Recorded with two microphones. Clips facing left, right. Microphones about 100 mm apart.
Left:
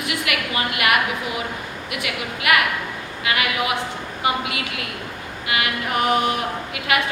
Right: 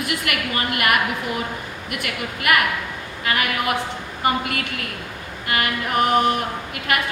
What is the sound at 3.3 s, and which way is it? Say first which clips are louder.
A woman's voice: even; 45° right (ahead or behind).